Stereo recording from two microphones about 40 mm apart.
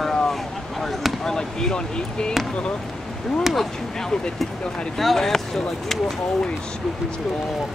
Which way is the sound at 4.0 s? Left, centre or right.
Centre.